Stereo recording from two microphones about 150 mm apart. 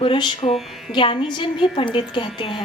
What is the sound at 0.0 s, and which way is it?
A woman's voice, 30° left (ahead or behind).